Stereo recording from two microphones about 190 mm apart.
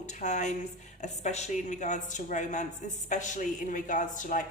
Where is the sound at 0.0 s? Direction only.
40° left (ahead or behind).